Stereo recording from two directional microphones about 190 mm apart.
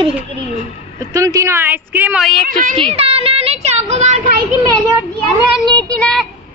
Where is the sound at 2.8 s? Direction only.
30° right (ahead or behind).